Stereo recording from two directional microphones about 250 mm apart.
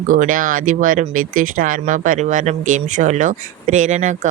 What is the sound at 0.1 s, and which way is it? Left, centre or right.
Speech, right.